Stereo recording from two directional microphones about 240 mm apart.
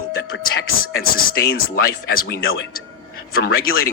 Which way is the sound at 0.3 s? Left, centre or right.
Left.